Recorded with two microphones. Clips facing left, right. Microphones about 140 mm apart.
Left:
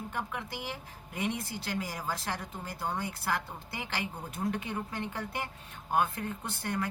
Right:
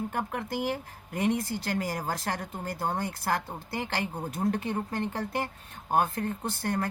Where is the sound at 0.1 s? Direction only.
45° right (ahead or behind).